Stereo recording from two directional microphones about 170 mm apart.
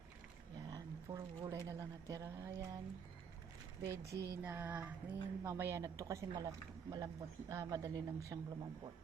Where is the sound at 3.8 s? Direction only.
15° right (ahead or behind).